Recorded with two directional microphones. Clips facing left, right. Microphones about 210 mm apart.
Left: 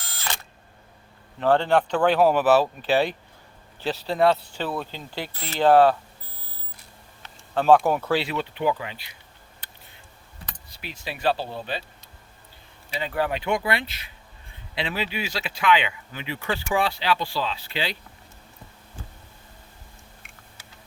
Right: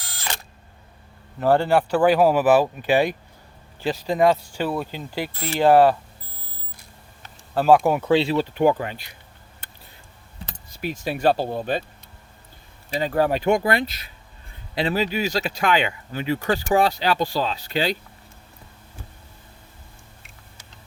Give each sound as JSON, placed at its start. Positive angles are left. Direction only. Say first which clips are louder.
{"t": 1.4, "sound": "speech", "louder": "right 2 dB", "side_deg": -10}
{"t": 7.5, "sound": "speech", "louder": "right 1 dB", "side_deg": -10}
{"t": 8.1, "sound": "speech", "louder": "right 6 dB", "side_deg": -30}
{"t": 8.5, "sound": "speech", "louder": "right 5 dB", "side_deg": -45}
{"t": 10.7, "sound": "speech", "louder": "right 9 dB", "side_deg": -45}
{"t": 13.0, "sound": "speech", "louder": "right 5 dB", "side_deg": -40}